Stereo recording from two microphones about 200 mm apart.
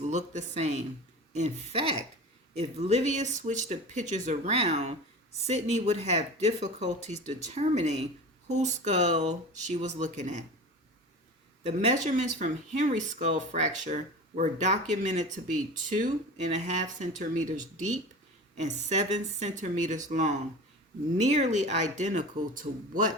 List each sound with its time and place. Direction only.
0.1 s speech: 35° right (ahead or behind)
11.6 s speech: 35° right (ahead or behind)